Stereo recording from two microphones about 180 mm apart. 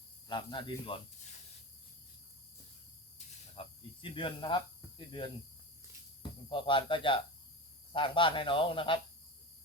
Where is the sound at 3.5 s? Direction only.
30° left (ahead or behind).